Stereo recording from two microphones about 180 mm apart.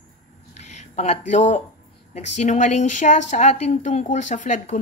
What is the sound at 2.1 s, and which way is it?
Speech, 40° left (ahead or behind).